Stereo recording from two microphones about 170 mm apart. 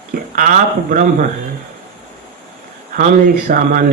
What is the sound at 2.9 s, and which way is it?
Mantra, 50° right (ahead or behind).